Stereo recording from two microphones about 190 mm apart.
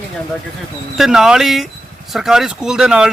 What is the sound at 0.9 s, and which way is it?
Speech, centre (ahead or behind).